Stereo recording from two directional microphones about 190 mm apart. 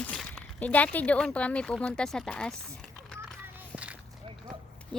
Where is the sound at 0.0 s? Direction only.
5° left (ahead or behind).